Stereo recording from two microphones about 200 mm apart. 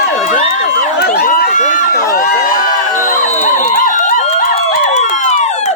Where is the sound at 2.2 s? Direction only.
45° left (ahead or behind).